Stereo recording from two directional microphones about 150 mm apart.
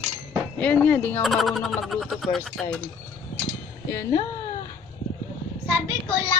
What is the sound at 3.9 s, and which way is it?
Speech, 20° left (ahead or behind).